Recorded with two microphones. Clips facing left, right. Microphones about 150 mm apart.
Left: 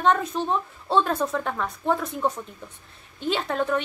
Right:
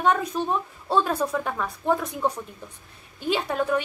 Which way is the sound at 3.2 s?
10° right (ahead or behind).